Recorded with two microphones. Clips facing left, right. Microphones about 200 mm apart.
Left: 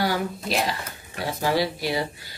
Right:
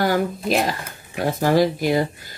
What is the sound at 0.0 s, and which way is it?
Speech, 50° right (ahead or behind).